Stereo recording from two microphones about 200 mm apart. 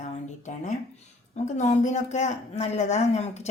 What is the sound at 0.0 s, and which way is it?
A woman's voice, 35° left (ahead or behind).